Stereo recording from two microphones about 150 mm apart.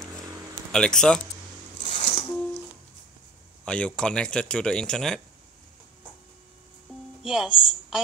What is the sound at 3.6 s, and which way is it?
Speech, 5° left (ahead or behind).